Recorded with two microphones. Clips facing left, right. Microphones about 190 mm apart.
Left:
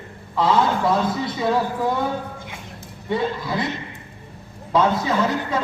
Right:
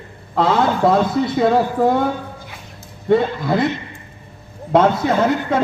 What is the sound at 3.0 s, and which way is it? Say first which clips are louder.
Speech: right 7 dB; 55° right (ahead or behind).